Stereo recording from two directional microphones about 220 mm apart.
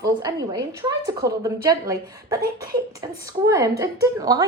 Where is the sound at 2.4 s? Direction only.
40° right (ahead or behind).